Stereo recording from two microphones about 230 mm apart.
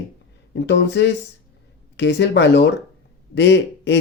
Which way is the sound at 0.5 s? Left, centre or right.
Left.